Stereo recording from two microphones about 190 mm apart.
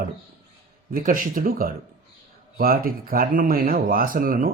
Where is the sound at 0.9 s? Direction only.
45° right (ahead or behind).